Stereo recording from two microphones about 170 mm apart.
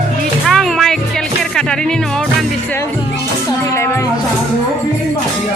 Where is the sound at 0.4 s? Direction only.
Centre (ahead or behind).